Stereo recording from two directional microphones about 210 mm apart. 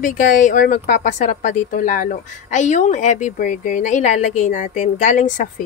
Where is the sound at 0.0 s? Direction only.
40° left (ahead or behind).